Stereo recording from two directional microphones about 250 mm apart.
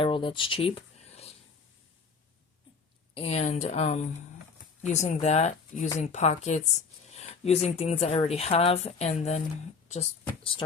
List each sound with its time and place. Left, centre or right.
0.0 s speech: left
3.2 s speech: left